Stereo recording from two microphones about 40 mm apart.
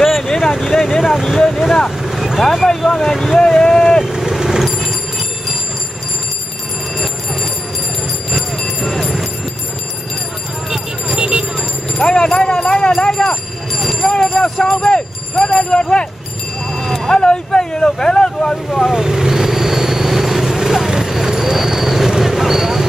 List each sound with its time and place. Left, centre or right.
0.0 s vehicle: centre
0.6 s a sound: centre
1.2 s speech: centre
2.0 s vehicle: centre
2.4 s speech: centre
3.3 s vehicle: centre
4.0 s vehicle: centre
8.4 s clip-clop: centre
11.1 s a sound: centre
12.0 s clip-clop: centre
12.9 s a sound: centre
16.7 s vehicle: centre
18.9 s vehicle: centre